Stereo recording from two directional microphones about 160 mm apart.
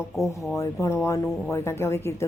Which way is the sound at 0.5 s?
20° left (ahead or behind).